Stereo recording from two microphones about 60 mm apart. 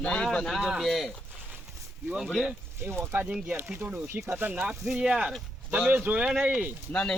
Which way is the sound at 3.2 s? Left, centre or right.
Centre.